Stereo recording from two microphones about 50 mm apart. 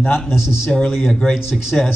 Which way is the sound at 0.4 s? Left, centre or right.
Left.